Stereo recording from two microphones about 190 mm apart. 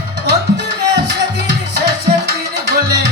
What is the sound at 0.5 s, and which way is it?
Music, 65° right (ahead or behind).